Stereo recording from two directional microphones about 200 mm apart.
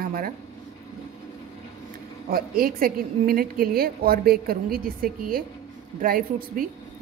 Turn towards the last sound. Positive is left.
turn(degrees=-45)  # may be behind; listen again after turning